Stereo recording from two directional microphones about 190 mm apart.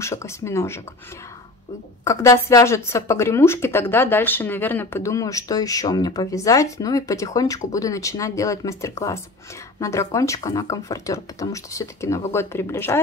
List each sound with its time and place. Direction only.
0.0 s a woman's voice: 15° left (ahead or behind)
2.0 s a woman's voice: 15° left (ahead or behind)